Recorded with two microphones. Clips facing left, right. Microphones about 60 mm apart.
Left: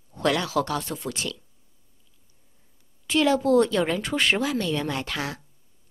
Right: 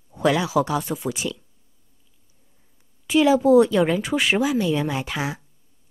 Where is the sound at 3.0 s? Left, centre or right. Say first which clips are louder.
Right 4 dB; centre.